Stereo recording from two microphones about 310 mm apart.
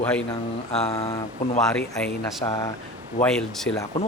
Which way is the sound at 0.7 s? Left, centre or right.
Centre.